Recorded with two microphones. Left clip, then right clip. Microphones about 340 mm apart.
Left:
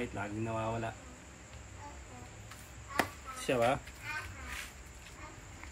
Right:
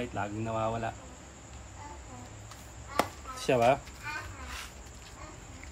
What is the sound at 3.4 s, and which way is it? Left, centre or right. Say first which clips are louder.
Speech: right 6 dB; centre.